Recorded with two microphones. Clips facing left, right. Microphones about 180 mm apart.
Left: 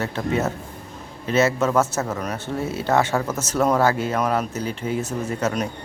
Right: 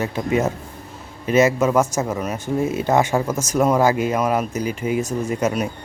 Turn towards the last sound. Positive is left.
turn(degrees=-10)  # may be behind; listen again after turning